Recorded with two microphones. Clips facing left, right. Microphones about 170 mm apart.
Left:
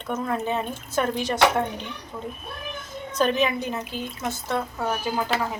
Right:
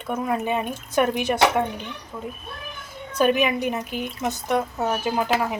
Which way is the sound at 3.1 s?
15° right (ahead or behind).